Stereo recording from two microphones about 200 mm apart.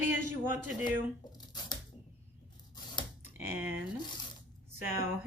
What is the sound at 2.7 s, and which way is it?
Scissors, 20° left (ahead or behind).